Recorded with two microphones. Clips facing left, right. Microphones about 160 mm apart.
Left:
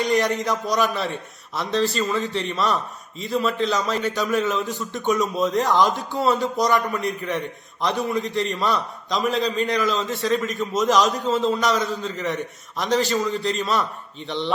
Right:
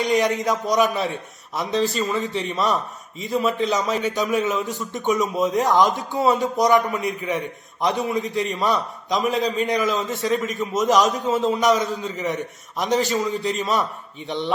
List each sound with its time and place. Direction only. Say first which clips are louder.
0.0 s a man's voice: right 1 dB; 20° right (ahead or behind)